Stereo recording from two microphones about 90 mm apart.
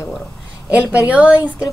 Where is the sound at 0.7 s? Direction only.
15° right (ahead or behind).